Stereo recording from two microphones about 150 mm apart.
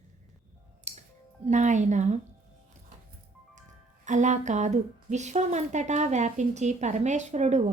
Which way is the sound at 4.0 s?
55° right (ahead or behind).